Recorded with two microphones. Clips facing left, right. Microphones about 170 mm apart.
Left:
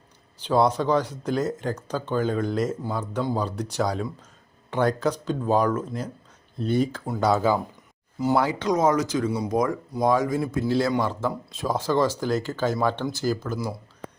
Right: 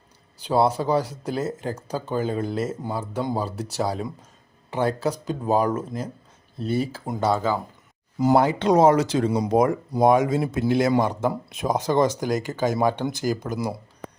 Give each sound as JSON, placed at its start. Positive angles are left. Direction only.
{"t": 0.3, "sound": "speech", "side_deg": -10}
{"t": 7.2, "sound": "speech", "side_deg": 0}
{"t": 8.7, "sound": "a man's voice", "side_deg": -30}